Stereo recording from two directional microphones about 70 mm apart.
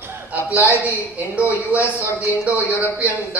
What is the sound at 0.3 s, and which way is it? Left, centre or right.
A man's voice, right.